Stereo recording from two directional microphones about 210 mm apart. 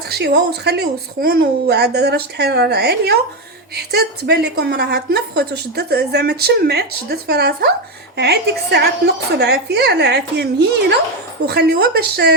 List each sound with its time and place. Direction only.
0.1 s a woman's voice: 50° right (ahead or behind)
4.3 s a woman's voice: 50° right (ahead or behind)